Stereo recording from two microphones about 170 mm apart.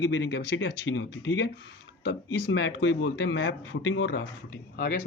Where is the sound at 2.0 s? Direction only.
70° left (ahead or behind); by 4.2 s 90° left.